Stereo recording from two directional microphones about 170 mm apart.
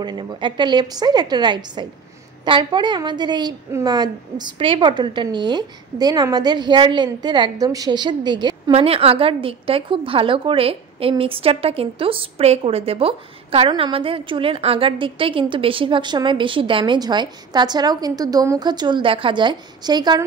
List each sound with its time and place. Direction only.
0.0 s a woman's voice: 25° right (ahead or behind)